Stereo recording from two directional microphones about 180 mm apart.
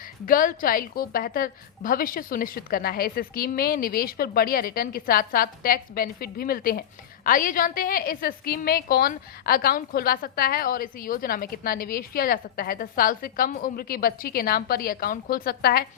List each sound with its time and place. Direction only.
0.3 s a woman's voice: 50° left (ahead or behind)